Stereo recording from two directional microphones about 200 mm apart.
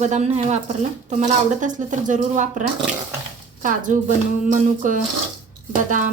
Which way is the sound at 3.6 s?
40° right (ahead or behind).